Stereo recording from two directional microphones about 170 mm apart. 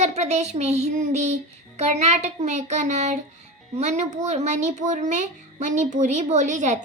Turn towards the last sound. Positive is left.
turn(degrees=-45)  # may be behind; listen again after turning